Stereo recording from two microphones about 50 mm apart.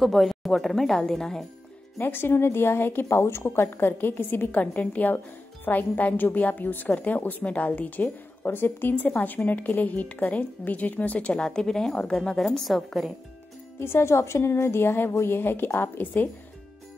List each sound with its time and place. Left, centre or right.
0.0 s speech: centre
2.0 s a woman's voice: left
8.5 s a woman's voice: left
8.9 s a woman's voice: left; by 13.1 s centre
13.7 s a woman's voice: left